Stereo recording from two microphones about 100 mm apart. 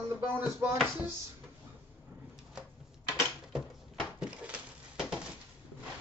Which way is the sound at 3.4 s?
5° right (ahead or behind).